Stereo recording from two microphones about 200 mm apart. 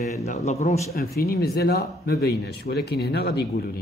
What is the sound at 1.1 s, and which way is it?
Speech, 50° left (ahead or behind).